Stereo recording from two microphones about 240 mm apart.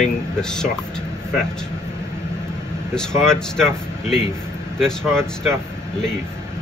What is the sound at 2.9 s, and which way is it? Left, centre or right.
Speech, centre.